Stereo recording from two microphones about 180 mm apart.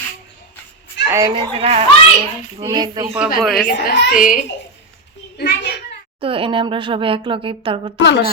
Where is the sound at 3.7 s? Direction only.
50° left (ahead or behind).